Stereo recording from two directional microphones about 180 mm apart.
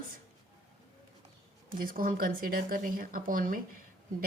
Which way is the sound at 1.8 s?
50° right (ahead or behind).